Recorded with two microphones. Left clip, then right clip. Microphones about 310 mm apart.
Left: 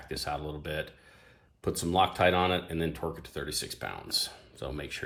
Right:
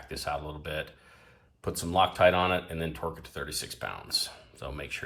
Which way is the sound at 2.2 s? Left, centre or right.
Left.